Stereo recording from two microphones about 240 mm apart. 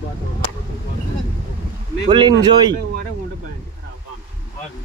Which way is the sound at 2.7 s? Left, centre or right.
Right.